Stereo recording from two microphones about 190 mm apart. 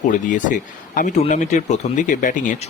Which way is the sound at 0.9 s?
40° left (ahead or behind).